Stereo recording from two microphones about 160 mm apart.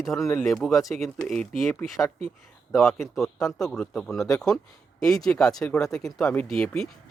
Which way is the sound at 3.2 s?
Centre (ahead or behind).